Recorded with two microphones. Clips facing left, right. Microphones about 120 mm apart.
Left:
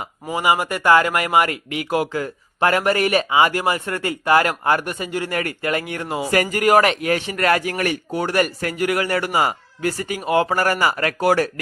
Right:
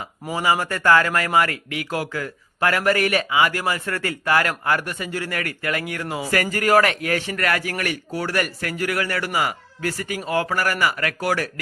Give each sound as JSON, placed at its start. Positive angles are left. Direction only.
{"t": 0.3, "sound": "speech", "side_deg": 15}